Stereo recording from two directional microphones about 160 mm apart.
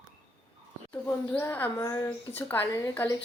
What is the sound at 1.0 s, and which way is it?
A woman's voice, 15° left (ahead or behind).